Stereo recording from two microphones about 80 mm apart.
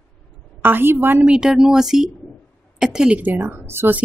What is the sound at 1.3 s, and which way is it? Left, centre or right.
A woman's voice, centre.